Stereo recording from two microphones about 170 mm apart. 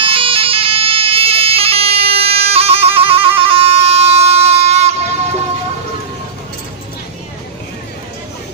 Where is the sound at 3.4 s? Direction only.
35° right (ahead or behind).